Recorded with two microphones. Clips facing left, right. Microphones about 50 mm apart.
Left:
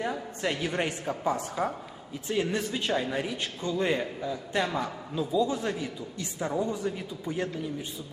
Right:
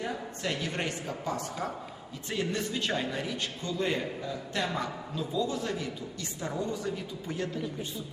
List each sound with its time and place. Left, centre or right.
0.4 s a man's voice: centre
5.1 s speech: centre